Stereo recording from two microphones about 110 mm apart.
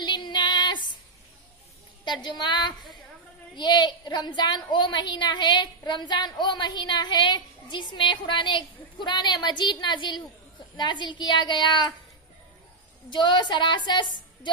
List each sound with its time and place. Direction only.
0.0 s female singing: 40° left (ahead or behind)
2.2 s speech: 45° left (ahead or behind)
13.1 s speech: 45° left (ahead or behind)